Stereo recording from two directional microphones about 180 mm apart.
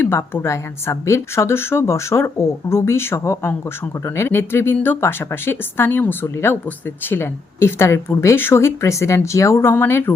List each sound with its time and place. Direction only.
0.0 s speech: 10° left (ahead or behind)